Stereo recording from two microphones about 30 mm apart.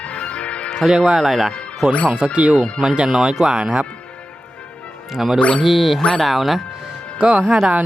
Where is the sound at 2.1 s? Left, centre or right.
Right.